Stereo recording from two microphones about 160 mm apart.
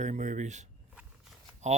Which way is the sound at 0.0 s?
50° right (ahead or behind).